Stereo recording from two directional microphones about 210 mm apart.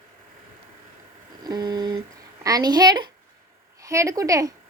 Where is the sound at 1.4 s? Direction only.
20° right (ahead or behind).